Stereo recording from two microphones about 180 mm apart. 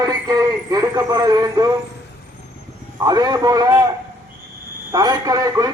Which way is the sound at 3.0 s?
20° right (ahead or behind).